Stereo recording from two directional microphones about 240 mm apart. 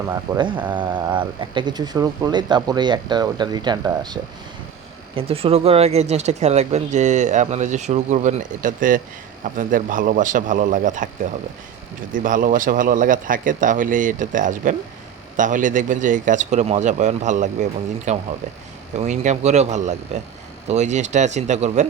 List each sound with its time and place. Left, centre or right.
0.1 s speech: centre
12.1 s speech: right